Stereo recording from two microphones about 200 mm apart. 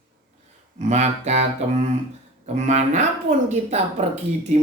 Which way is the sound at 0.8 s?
35° right (ahead or behind).